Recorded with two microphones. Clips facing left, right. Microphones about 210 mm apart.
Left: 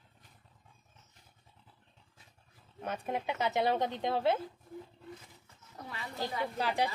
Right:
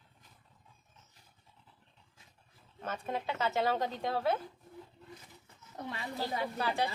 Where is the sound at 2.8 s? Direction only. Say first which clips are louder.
Left 1 dB; 15° left (ahead or behind).